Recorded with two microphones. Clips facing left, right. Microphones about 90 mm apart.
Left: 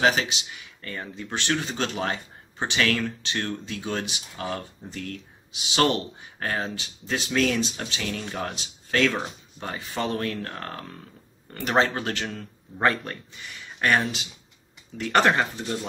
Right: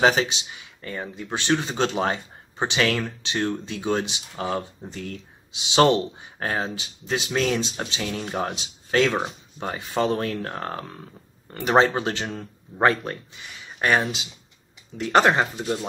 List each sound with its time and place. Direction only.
0.8 s speech: 15° right (ahead or behind)